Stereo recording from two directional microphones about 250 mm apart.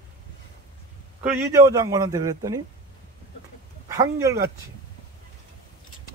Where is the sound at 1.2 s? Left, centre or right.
Centre.